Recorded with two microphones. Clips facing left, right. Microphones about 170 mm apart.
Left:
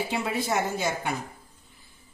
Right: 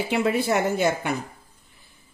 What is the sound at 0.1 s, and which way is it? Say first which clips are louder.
Speech: right 9 dB; 65° right (ahead or behind).